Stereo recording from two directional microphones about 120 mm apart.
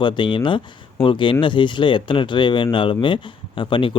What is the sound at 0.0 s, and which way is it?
Speech, 40° left (ahead or behind).